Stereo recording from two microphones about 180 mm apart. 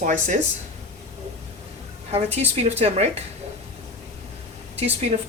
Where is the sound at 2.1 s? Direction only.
35° right (ahead or behind).